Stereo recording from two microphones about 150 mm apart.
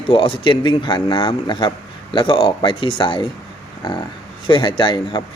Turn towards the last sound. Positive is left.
turn(degrees=30)  # may be behind; listen again after turning